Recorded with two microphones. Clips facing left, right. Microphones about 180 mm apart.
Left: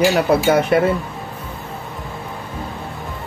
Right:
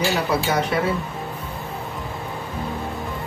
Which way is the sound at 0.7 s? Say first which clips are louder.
Left 9 dB; 55° left (ahead or behind).